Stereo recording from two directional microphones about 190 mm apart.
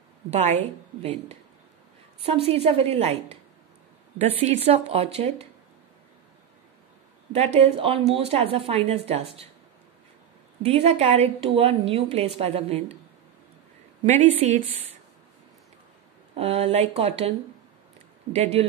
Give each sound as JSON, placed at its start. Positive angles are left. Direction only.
{"t": 0.3, "sound": "a woman's voice", "side_deg": -35}
{"t": 4.2, "sound": "a woman's voice", "side_deg": -30}
{"t": 7.3, "sound": "a woman's voice", "side_deg": -30}
{"t": 10.6, "sound": "a woman's voice", "side_deg": -35}
{"t": 14.4, "sound": "a woman's voice", "side_deg": -35}
{"t": 16.3, "sound": "a woman's voice", "side_deg": -35}
{"t": 18.3, "sound": "a woman's voice", "side_deg": -35}